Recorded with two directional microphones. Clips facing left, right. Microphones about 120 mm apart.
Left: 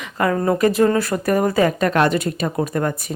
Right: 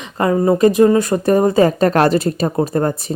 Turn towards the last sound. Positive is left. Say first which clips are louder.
# right 4 dB
turn(degrees=-30)  # may be behind; listen again after turning